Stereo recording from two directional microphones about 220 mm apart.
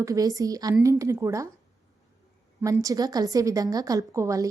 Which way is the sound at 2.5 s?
15° right (ahead or behind).